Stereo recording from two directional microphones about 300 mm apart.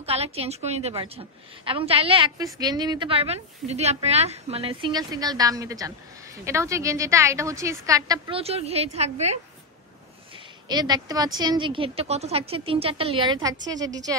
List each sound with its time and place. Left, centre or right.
0.0 s a woman's voice: centre
10.3 s a sound: centre
11.3 s a woman's voice: centre